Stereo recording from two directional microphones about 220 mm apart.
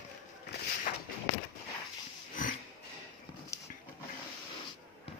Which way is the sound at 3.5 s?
15° left (ahead or behind).